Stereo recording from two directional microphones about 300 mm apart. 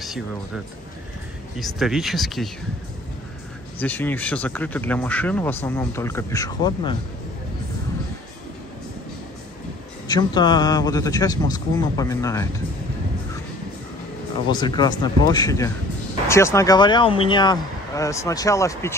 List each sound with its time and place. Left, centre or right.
1.6 s speech: centre
3.8 s speech: centre
10.0 s speech: centre
14.5 s speech: centre